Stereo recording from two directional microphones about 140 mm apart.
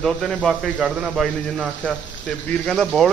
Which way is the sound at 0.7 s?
10° right (ahead or behind).